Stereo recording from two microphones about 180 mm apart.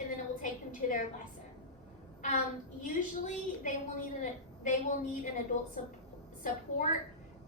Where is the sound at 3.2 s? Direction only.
45° left (ahead or behind).